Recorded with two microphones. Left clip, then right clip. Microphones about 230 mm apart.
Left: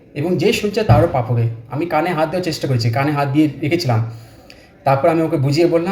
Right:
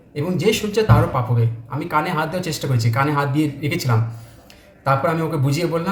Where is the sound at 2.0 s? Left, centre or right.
Centre.